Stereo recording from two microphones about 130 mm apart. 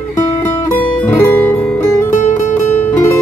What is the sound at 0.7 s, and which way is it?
Guitar, 15° left (ahead or behind).